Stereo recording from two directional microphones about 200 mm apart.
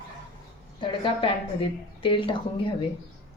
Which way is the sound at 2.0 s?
25° left (ahead or behind).